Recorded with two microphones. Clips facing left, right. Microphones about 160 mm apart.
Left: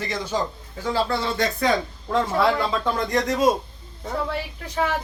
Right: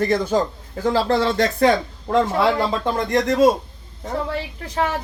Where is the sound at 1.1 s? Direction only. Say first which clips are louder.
Right 5 dB; 75° right (ahead or behind).